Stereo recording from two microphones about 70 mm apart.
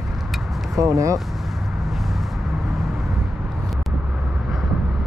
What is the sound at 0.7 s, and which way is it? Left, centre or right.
Speech, right.